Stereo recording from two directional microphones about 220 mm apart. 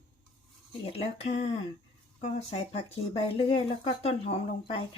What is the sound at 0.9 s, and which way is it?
Speech, 30° left (ahead or behind).